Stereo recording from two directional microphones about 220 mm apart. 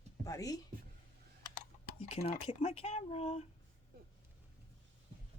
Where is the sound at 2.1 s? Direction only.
25° left (ahead or behind).